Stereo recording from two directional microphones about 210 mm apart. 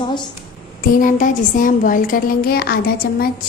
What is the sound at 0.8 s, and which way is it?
A woman's voice, 40° left (ahead or behind).